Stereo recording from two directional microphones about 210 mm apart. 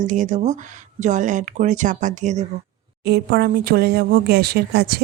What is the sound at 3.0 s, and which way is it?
Speech, 50° right (ahead or behind).